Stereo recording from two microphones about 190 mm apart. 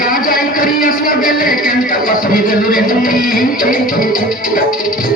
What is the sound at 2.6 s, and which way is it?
Music, 50° left (ahead or behind).